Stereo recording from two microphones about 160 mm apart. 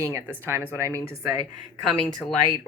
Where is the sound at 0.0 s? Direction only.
15° right (ahead or behind).